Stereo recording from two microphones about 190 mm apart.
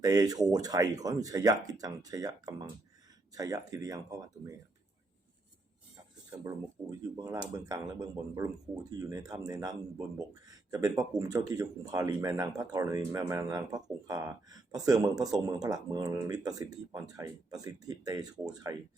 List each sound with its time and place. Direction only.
0.0 s speech: 20° right (ahead or behind)
6.3 s speech: 20° right (ahead or behind)